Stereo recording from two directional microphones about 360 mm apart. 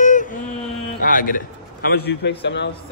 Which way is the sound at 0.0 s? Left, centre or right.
Left.